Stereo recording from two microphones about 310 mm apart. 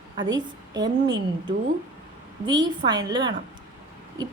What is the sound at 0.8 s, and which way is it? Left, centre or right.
Speech, centre.